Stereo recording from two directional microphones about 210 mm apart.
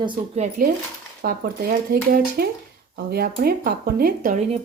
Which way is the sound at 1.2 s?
45° right (ahead or behind).